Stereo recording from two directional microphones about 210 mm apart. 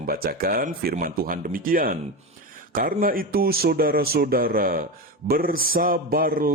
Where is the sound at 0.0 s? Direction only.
45° right (ahead or behind).